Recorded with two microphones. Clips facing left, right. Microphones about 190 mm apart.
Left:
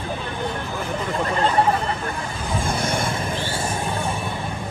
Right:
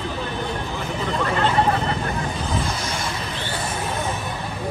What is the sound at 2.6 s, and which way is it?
Vehicle, 55° left (ahead or behind).